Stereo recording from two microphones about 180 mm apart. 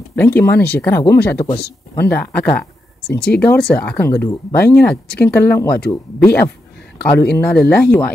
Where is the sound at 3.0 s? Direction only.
60° left (ahead or behind).